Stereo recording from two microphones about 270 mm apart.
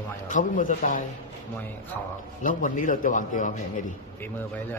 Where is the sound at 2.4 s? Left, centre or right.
Left.